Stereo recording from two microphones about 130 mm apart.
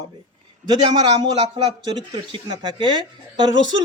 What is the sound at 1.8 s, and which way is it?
A man's voice, 35° right (ahead or behind).